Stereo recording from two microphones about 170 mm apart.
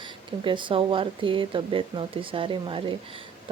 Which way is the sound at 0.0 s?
30° right (ahead or behind).